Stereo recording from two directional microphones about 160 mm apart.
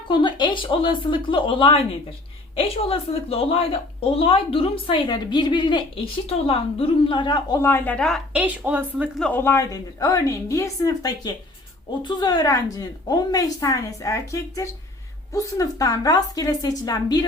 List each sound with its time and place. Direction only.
0.1 s a woman's voice: 30° left (ahead or behind)
7.6 s speech: 10° left (ahead or behind)
8.3 s a woman's voice: 10° right (ahead or behind)
9.1 s a woman's voice: 10° left (ahead or behind); by 17.2 s 25° left (ahead or behind)